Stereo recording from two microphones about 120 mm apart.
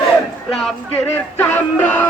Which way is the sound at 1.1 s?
20° left (ahead or behind).